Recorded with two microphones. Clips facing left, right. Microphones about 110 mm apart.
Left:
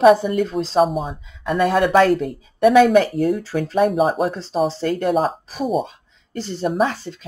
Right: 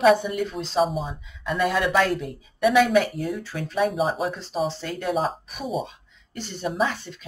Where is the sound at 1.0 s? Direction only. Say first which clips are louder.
Left 5 dB; 45° left (ahead or behind).